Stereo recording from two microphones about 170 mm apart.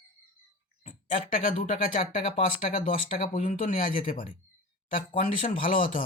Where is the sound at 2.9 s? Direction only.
45° left (ahead or behind).